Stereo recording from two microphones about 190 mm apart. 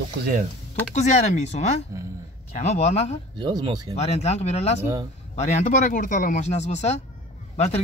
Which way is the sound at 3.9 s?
35° left (ahead or behind).